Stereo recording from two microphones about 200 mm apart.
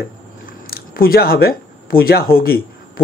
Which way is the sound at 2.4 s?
50° left (ahead or behind).